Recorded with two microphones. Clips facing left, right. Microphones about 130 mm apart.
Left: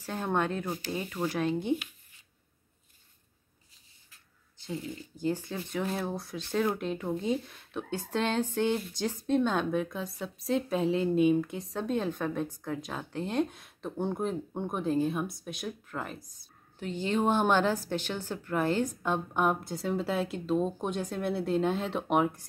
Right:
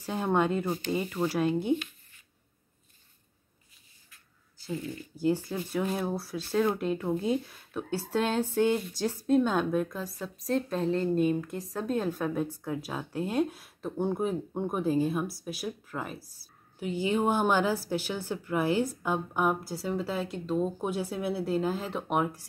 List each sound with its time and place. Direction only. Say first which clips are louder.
0.0 s speech: right 3 dB; 10° right (ahead or behind)
4.7 s speech: right 1 dB; 20° left (ahead or behind)
5.2 s speech: right 4 dB; 10° right (ahead or behind)